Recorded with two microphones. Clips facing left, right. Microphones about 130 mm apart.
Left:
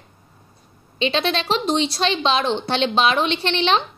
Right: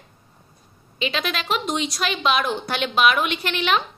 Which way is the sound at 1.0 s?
30° left (ahead or behind).